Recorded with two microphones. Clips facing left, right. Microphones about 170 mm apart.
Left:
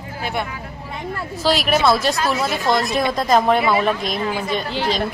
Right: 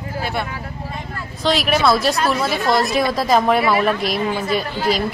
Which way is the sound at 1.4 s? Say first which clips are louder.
Even; centre (ahead or behind).